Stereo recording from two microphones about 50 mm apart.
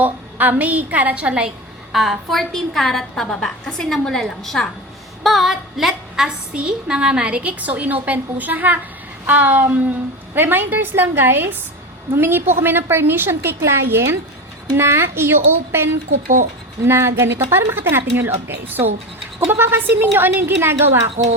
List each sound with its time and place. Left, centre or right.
0.0 s a woman's voice: right
1.5 s a woman's voice: centre
5.2 s female singing: centre
6.2 s a woman's voice: centre; by 18.9 s right
19.5 s a woman's voice: right